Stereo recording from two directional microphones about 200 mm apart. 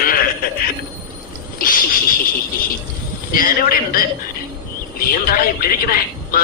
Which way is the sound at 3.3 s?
45° left (ahead or behind).